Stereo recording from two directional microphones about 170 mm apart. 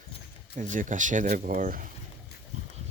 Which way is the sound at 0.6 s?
50° right (ahead or behind).